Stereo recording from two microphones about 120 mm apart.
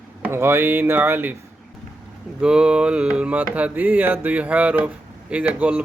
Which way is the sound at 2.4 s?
5° right (ahead or behind).